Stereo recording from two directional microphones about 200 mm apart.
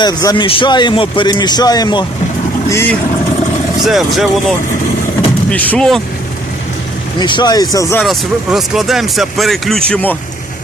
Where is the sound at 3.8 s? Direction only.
Centre (ahead or behind).